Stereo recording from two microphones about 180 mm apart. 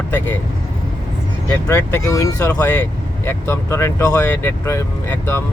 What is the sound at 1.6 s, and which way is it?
Speech, 15° left (ahead or behind).